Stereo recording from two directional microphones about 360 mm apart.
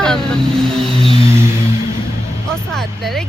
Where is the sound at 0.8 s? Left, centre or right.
Centre.